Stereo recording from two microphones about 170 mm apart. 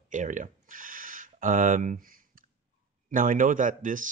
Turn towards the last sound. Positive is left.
turn(degrees=-50)  # may be behind; listen again after turning